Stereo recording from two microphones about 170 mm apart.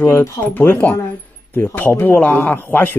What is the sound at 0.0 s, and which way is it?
A man's voice, 15° left (ahead or behind).